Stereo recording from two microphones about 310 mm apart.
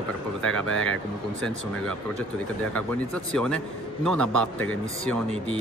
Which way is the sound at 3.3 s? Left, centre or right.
Centre.